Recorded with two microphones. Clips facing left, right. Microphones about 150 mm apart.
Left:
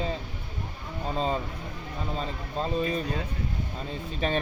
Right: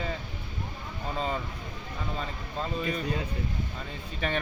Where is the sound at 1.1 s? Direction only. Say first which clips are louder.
Left 3 dB; 30° left (ahead or behind).